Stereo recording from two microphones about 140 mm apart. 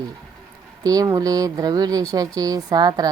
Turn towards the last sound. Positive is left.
turn(degrees=-30)  # may be behind; listen again after turning